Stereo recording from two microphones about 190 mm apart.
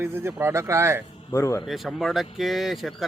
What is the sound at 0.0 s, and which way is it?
Speech, 10° right (ahead or behind).